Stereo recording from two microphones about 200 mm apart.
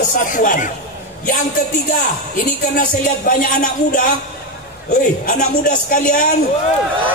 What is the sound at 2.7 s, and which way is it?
A man's voice, 45° left (ahead or behind).